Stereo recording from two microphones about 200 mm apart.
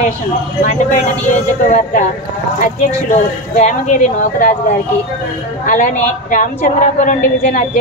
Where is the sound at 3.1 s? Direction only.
35° left (ahead or behind).